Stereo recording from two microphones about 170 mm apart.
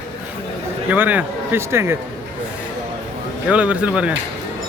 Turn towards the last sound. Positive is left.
turn(degrees=-5)  # may be behind; listen again after turning